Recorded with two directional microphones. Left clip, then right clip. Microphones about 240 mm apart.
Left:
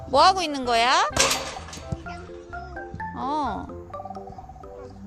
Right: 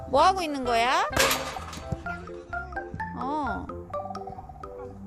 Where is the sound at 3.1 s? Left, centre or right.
Centre.